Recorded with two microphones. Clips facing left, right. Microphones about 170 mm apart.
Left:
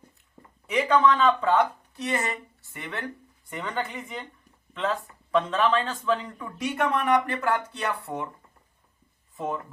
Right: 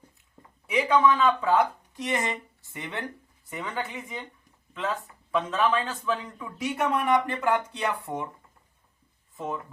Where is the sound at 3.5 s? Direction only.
5° right (ahead or behind).